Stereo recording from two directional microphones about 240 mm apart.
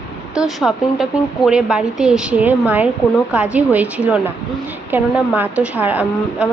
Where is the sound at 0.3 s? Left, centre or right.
Centre.